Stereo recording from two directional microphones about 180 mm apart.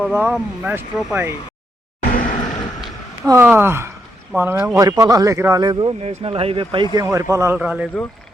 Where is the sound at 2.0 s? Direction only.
50° left (ahead or behind).